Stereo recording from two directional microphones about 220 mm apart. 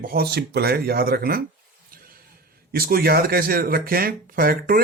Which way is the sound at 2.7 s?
45° right (ahead or behind).